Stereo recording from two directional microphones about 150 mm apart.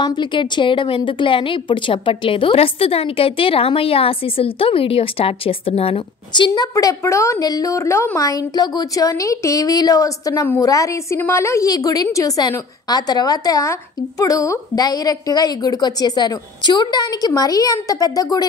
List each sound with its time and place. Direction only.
0.0 s a woman's voice: 30° left (ahead or behind)